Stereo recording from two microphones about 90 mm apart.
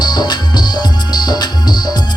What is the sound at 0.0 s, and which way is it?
Music, 50° left (ahead or behind).